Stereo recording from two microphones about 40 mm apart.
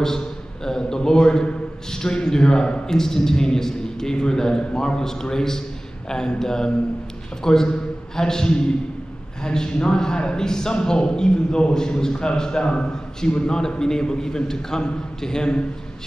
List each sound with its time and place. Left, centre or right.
0.7 s a man's voice: centre